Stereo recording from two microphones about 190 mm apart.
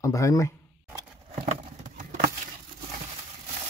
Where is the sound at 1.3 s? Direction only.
45° right (ahead or behind).